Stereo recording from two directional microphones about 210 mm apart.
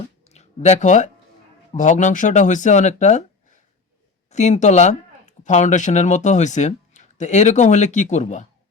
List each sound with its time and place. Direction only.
0.3 s speech: 30° left (ahead or behind)